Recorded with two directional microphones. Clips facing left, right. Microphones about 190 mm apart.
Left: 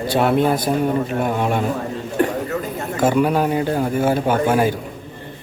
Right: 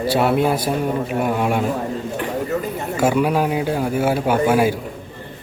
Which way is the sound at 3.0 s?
5° right (ahead or behind).